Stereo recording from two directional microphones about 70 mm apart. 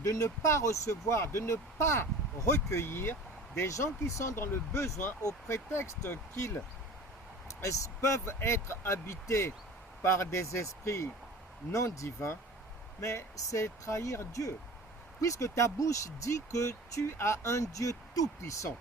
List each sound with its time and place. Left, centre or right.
0.0 s speech: left
3.7 s speech: left